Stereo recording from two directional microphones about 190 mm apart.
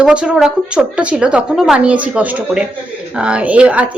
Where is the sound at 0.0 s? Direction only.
5° right (ahead or behind).